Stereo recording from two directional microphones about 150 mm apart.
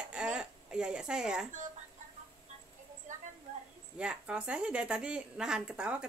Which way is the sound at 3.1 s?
55° right (ahead or behind).